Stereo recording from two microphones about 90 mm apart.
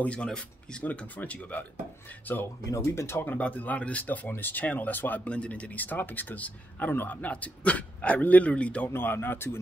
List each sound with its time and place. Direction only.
0.0 s speech: 15° left (ahead or behind)
3.3 s speech: 15° left (ahead or behind)